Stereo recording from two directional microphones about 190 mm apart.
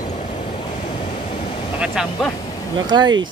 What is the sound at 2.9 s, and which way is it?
Speech, 20° right (ahead or behind).